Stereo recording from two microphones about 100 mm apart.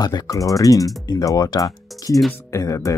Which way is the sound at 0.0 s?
40° left (ahead or behind).